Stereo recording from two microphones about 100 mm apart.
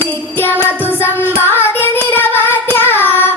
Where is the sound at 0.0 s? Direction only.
20° left (ahead or behind).